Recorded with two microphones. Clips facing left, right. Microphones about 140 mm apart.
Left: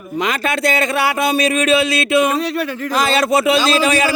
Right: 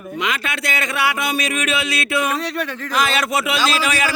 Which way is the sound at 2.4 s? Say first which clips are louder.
Left 4 dB; 5° left (ahead or behind).